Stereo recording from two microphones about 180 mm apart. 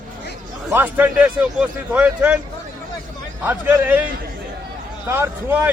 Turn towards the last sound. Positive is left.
turn(degrees=-10)  # may be behind; listen again after turning